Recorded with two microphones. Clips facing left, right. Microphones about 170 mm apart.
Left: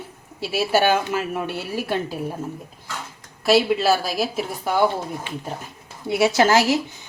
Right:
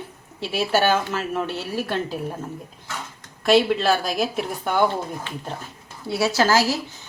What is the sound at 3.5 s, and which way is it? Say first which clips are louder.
Speech: even; 5° left (ahead or behind).